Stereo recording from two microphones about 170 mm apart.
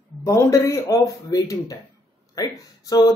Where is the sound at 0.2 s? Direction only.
15° left (ahead or behind).